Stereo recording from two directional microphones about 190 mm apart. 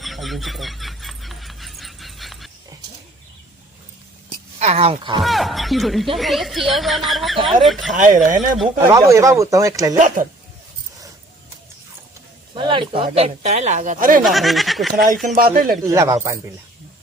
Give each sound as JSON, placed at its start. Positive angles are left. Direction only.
{"t": 0.0, "sound": "a sound", "side_deg": 0}
{"t": 4.6, "sound": "speech", "side_deg": -35}
{"t": 5.2, "sound": "speech", "side_deg": 0}
{"t": 7.9, "sound": "speech", "side_deg": -45}
{"t": 8.4, "sound": "speech", "side_deg": 0}
{"t": 8.9, "sound": "speech", "side_deg": -15}
{"t": 12.5, "sound": "speech", "side_deg": -25}
{"t": 14.3, "sound": "speech", "side_deg": 0}
{"t": 15.4, "sound": "speech", "side_deg": -50}
{"t": 15.9, "sound": "speech", "side_deg": -15}